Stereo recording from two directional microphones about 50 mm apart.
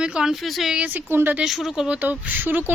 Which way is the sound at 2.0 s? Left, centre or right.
Right.